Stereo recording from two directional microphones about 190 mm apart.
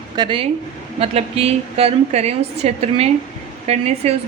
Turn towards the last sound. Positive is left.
turn(degrees=-35)  # may be behind; listen again after turning